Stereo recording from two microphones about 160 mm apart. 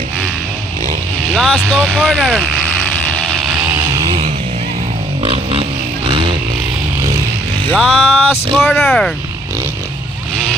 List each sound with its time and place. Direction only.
1.3 s speech: 5° left (ahead or behind)
2.0 s vehicle: centre (ahead or behind)
5.2 s a sound: 35° right (ahead or behind)
7.6 s speech: 5° left (ahead or behind)